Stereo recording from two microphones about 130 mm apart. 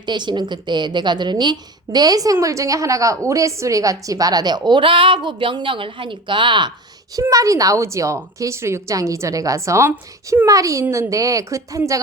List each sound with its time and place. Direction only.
0.0 s a woman's voice: 35° right (ahead or behind)
7.2 s a woman's voice: 25° right (ahead or behind)